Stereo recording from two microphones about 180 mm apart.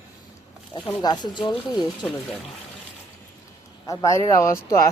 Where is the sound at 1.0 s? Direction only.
25° left (ahead or behind).